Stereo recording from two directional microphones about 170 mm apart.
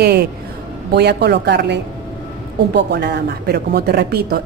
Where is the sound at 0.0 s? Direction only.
70° right (ahead or behind).